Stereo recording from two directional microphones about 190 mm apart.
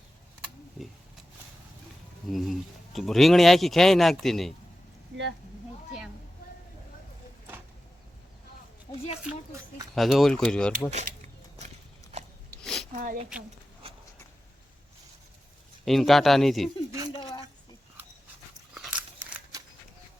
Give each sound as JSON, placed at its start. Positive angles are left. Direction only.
{"t": 2.3, "sound": "speech", "side_deg": 0}
{"t": 8.9, "sound": "speech", "side_deg": 20}
{"t": 9.9, "sound": "speech", "side_deg": 0}
{"t": 12.6, "sound": "a sound", "side_deg": 0}
{"t": 12.9, "sound": "speech", "side_deg": -40}
{"t": 15.8, "sound": "speech", "side_deg": 0}
{"t": 17.2, "sound": "a sound", "side_deg": 20}
{"t": 18.7, "sound": "dog", "side_deg": -5}